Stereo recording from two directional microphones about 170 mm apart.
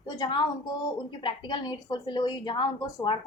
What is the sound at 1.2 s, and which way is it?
A woman's voice, 25° left (ahead or behind).